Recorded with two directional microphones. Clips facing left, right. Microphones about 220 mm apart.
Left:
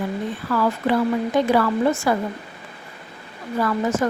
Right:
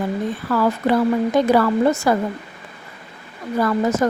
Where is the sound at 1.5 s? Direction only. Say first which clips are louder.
Right 2 dB; 40° right (ahead or behind).